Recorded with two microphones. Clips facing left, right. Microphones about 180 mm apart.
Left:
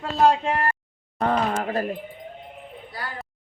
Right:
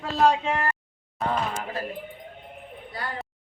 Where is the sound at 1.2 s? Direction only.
50° left (ahead or behind).